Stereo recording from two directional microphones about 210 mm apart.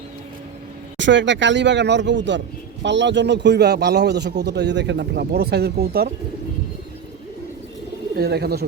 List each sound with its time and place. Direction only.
0.9 s a man's voice: 60° right (ahead or behind)
8.1 s a man's voice: 50° right (ahead or behind)